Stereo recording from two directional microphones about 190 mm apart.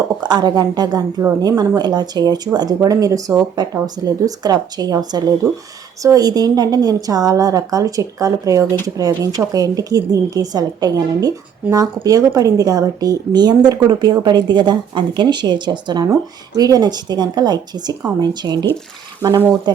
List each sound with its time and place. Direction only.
0.2 s a woman's voice: 20° right (ahead or behind)